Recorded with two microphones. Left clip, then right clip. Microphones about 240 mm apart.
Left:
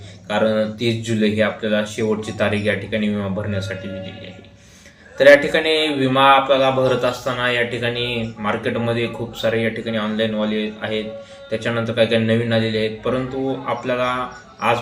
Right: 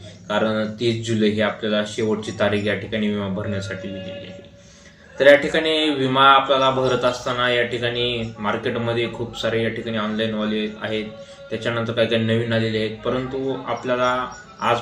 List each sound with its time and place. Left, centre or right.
0.3 s speech: centre
5.1 s speech: centre